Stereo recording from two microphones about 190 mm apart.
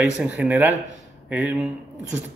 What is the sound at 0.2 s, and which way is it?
Speech, 5° right (ahead or behind).